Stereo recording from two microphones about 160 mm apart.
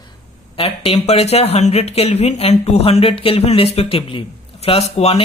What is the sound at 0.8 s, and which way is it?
Speech, 40° left (ahead or behind).